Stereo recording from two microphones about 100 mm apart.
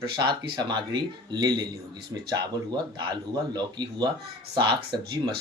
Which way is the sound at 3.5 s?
45° right (ahead or behind).